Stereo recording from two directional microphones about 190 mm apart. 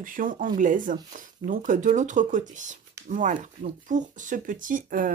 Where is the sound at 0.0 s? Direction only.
45° right (ahead or behind).